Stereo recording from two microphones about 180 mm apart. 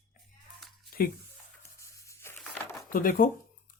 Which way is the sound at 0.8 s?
55° left (ahead or behind).